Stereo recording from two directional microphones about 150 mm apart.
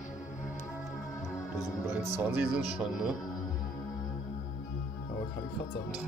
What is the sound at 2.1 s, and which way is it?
Speech, 10° right (ahead or behind).